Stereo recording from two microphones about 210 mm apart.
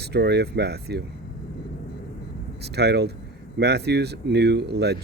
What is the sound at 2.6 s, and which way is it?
Speech, 50° right (ahead or behind).